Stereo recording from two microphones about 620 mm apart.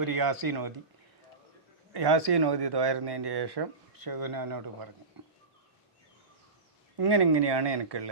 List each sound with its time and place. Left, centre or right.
0.0 s speech: right
1.9 s speech: right
5.2 s a sound: right
7.0 s speech: right